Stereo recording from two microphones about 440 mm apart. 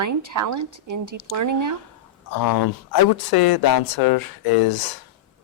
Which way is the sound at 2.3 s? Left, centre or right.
Left.